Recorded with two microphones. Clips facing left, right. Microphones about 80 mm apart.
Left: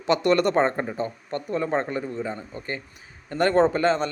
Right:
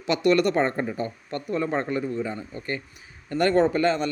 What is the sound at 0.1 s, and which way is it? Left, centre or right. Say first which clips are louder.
A man's voice: left 1 dB; left.